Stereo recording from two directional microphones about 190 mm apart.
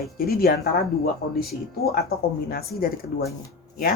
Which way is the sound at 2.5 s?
50° left (ahead or behind).